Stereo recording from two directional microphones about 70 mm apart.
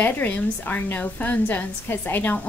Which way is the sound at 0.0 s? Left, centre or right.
Left.